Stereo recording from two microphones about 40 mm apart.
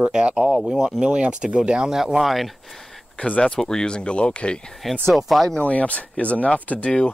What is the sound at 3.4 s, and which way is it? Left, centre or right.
Speech, centre.